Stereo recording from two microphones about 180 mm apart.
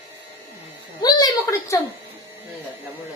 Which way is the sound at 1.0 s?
20° left (ahead or behind).